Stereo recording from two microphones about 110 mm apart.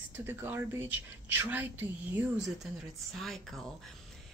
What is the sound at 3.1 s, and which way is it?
Speech, centre (ahead or behind).